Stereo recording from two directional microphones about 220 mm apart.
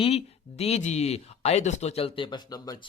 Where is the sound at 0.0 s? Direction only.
30° left (ahead or behind).